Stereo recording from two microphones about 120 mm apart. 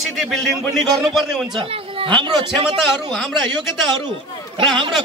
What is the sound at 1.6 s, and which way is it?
Speech, 50° right (ahead or behind).